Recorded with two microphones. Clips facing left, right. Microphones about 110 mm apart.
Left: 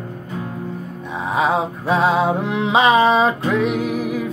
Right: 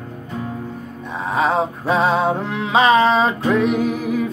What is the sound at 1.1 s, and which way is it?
Music, 10° left (ahead or behind).